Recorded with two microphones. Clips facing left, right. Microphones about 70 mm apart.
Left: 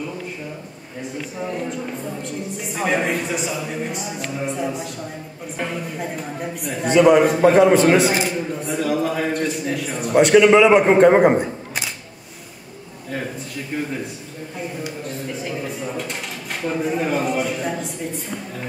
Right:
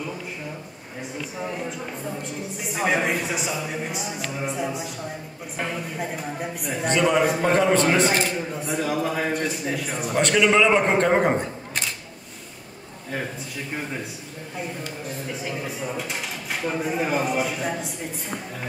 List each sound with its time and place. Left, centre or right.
1.0 s speech: centre
10.1 s a man's voice: centre
15.0 s speech: centre